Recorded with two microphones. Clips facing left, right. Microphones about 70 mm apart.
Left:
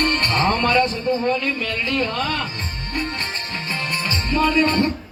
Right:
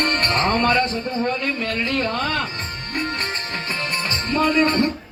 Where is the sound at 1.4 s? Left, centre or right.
Right.